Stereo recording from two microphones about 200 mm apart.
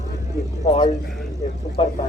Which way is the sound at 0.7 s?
25° left (ahead or behind).